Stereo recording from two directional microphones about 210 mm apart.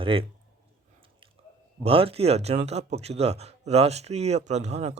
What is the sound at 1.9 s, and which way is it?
Speech, 25° right (ahead or behind).